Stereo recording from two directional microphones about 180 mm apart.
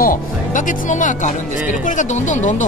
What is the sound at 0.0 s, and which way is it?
Speech, 50° left (ahead or behind).